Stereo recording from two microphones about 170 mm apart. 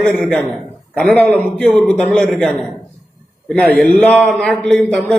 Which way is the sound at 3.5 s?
Centre (ahead or behind).